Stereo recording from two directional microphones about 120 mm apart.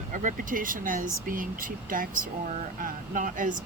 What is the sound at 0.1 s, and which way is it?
Speech, 90° right.